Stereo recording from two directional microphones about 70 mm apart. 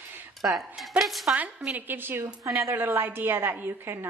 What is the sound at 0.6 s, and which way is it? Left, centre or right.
Speech, centre.